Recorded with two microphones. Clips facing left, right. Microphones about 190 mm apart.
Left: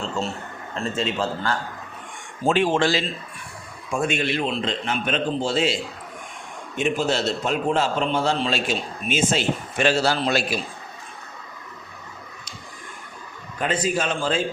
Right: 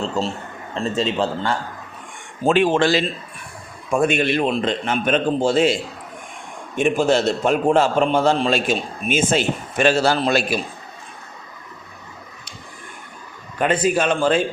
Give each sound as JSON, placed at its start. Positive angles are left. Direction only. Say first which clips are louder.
{"t": 0.2, "sound": "a man's voice", "louder": "right 4 dB", "side_deg": -40}
{"t": 2.5, "sound": "a man's voice", "louder": "right 4 dB", "side_deg": -60}
{"t": 6.7, "sound": "a man's voice", "louder": "right 5 dB", "side_deg": -55}
{"t": 13.6, "sound": "a man's voice", "louder": "right 5 dB", "side_deg": -60}